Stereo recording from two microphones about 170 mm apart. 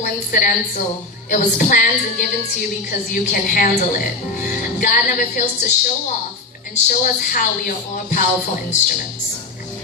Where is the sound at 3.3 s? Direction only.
55° left (ahead or behind).